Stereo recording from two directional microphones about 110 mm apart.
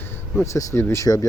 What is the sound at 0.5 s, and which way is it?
Speech, 25° left (ahead or behind).